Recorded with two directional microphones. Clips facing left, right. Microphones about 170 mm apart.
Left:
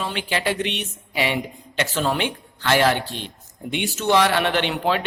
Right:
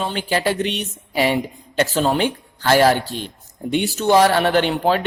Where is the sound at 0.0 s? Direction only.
35° right (ahead or behind).